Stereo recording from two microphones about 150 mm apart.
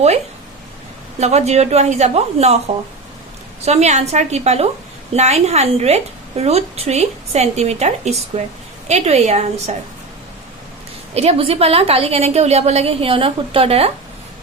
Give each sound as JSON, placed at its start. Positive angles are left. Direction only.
{"t": 1.2, "sound": "a woman's voice", "side_deg": -45}
{"t": 3.7, "sound": "a woman's voice", "side_deg": -50}
{"t": 11.1, "sound": "a woman's voice", "side_deg": -45}